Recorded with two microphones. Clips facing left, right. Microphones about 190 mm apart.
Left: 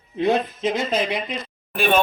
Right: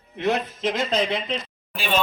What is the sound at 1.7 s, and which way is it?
Speech, 55° left (ahead or behind).